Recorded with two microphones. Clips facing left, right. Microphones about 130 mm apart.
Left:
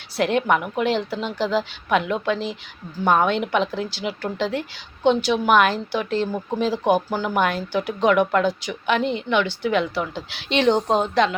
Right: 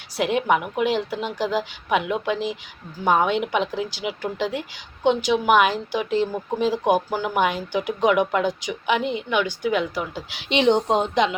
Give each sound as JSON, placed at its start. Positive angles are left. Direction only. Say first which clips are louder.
{"t": 0.2, "sound": "a woman's voice", "louder": "left 1 dB", "side_deg": -10}